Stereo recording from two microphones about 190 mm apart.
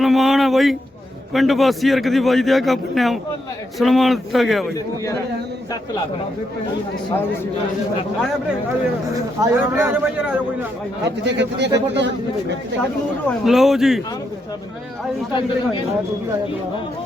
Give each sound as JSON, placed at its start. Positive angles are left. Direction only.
{"t": 0.0, "sound": "a man's voice", "side_deg": 0}
{"t": 9.4, "sound": "a man's voice", "side_deg": -15}
{"t": 11.3, "sound": "speech", "side_deg": -65}
{"t": 13.4, "sound": "a man's voice", "side_deg": 0}
{"t": 15.3, "sound": "speech", "side_deg": 25}